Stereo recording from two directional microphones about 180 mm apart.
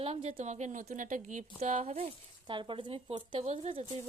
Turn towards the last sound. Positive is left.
turn(degrees=-30)  # may be behind; listen again after turning